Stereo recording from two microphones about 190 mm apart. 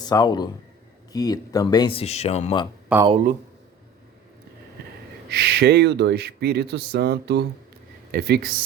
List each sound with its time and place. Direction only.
0.0 s speech: 20° left (ahead or behind)
2.9 s speech: 10° right (ahead or behind)
5.3 s speech: 60° right (ahead or behind)